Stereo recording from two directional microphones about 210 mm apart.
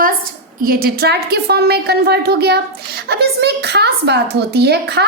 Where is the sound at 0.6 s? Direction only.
45° right (ahead or behind).